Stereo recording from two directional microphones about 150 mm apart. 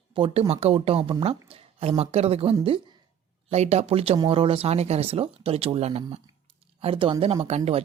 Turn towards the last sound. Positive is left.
turn(degrees=-45)  # may be behind; listen again after turning